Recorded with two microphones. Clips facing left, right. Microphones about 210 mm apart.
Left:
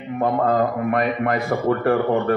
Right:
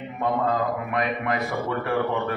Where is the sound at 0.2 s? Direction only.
50° left (ahead or behind).